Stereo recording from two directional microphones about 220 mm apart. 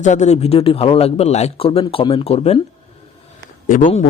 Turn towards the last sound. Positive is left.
turn(degrees=35)  # may be behind; listen again after turning